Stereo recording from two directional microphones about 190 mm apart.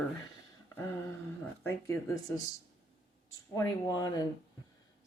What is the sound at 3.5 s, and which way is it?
Speech, 20° left (ahead or behind).